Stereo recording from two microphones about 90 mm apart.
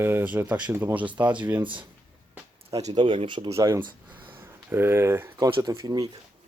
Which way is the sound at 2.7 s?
40° right (ahead or behind).